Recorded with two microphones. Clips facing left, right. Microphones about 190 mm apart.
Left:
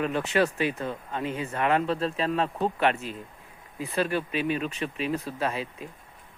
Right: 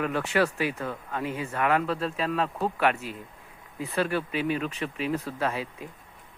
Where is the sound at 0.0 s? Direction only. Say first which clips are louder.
Left 1 dB; 20° left (ahead or behind).